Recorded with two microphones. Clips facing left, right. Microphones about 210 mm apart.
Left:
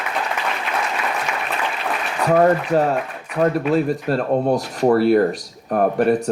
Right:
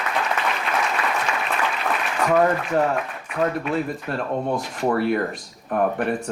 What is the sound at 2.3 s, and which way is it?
Speech, 35° left (ahead or behind).